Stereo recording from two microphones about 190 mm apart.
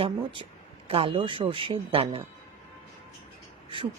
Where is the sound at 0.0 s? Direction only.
25° right (ahead or behind).